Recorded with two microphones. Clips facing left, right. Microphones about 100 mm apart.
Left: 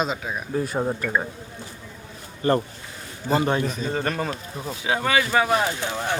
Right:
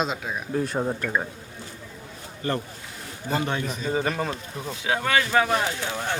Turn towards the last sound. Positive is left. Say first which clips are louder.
# left 2 dB
turn(degrees=10)  # may be behind; listen again after turning